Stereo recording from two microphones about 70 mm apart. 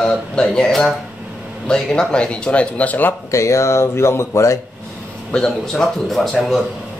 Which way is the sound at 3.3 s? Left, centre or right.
Left.